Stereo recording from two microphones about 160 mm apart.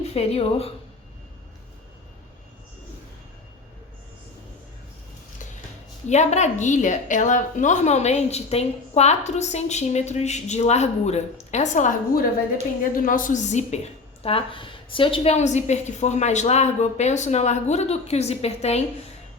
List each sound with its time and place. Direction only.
0.1 s speech: 40° left (ahead or behind)
6.1 s a woman's voice: 45° left (ahead or behind)